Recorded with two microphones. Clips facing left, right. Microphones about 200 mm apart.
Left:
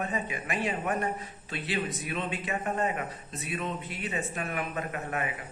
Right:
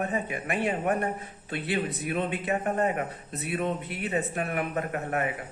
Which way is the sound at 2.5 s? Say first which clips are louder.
Right 3 dB; 40° right (ahead or behind).